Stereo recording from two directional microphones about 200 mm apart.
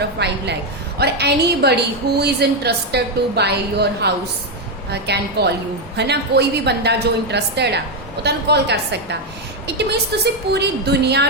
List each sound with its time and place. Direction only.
0.2 s a woman's voice: 55° right (ahead or behind)